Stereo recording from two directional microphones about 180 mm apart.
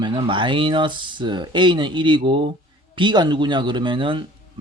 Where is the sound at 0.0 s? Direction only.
30° right (ahead or behind).